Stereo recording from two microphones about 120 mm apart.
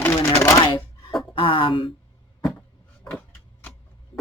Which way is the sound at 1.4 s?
45° left (ahead or behind).